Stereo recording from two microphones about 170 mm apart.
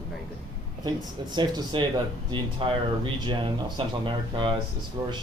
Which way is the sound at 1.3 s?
25° right (ahead or behind).